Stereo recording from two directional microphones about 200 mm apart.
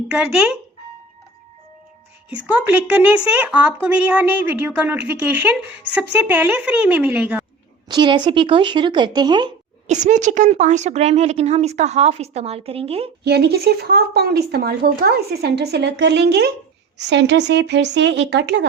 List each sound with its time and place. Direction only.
0.2 s speech: 5° right (ahead or behind)
2.6 s a woman's voice: 10° right (ahead or behind)
7.9 s speech: 20° right (ahead or behind)
9.8 s speech: 35° right (ahead or behind)
13.2 s speech: 55° right (ahead or behind)